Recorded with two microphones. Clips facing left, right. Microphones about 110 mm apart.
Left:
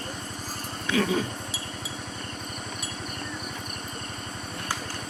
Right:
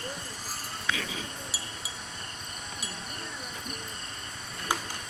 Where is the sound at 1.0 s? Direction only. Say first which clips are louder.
Left 13 dB; 55° left (ahead or behind).